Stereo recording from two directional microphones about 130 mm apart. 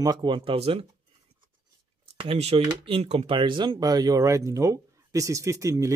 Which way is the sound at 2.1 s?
50° right (ahead or behind).